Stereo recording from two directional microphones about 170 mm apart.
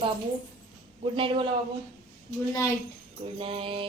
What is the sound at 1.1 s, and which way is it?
Mantra, 30° right (ahead or behind).